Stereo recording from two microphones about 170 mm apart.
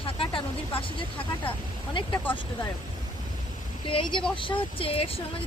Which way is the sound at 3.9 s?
30° left (ahead or behind).